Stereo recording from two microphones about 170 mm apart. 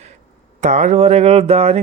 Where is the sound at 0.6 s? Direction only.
45° right (ahead or behind).